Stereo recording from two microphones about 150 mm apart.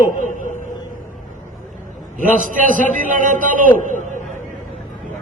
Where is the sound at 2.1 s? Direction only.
60° right (ahead or behind).